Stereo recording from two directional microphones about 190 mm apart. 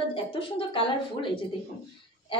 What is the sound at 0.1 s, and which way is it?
A woman's voice, 25° left (ahead or behind).